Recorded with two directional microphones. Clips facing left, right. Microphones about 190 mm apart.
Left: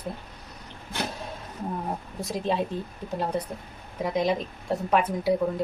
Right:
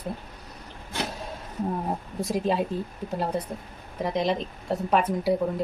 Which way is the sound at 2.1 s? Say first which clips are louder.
Right 2 dB; 5° right (ahead or behind).